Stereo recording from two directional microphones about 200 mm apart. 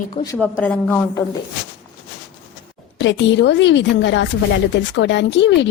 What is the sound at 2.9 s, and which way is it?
Speech, 65° left (ahead or behind).